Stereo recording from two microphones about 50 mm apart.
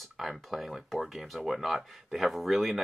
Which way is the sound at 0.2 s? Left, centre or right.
Centre.